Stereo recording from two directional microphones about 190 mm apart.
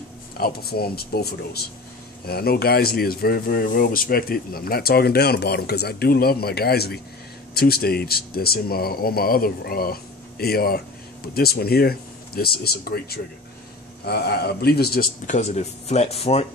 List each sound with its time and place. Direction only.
0.4 s speech: 55° left (ahead or behind); by 16.4 s 30° left (ahead or behind)